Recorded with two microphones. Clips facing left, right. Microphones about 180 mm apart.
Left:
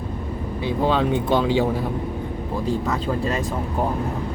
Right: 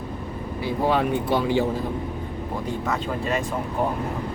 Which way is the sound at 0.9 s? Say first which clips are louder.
Left 1 dB; 90° left.